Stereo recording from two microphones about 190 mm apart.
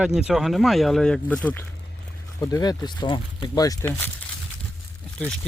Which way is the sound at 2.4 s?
20° left (ahead or behind).